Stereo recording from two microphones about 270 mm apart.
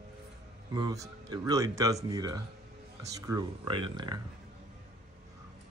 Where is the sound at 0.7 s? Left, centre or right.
Centre.